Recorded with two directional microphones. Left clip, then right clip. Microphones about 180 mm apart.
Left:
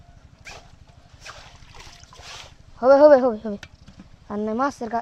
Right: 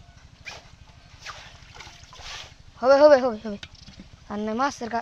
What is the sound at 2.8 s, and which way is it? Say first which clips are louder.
Speech: left 3 dB; 70° left (ahead or behind).